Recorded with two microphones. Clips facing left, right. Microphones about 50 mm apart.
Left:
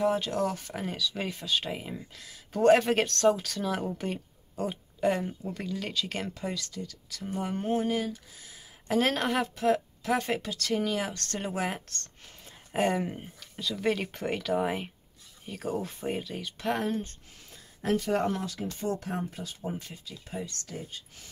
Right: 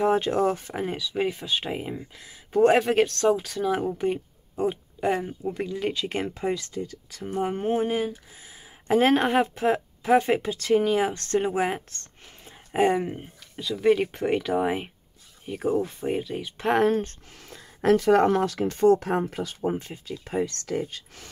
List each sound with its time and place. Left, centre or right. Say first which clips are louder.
0.0 s speech: right 5 dB; right
2.8 s speech: right 3 dB; centre
16.5 s speech: right 7 dB; right
16.8 s speech: right 9 dB; right
17.5 s speech: right 8 dB; right
19.6 s speech: right 8 dB; right
20.2 s speech: right 10 dB; right
20.6 s speech: right 11 dB; right